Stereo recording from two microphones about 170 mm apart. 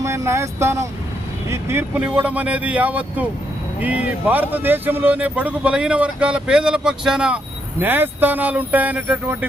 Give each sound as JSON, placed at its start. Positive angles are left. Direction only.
{"t": 0.0, "sound": "speech", "side_deg": -15}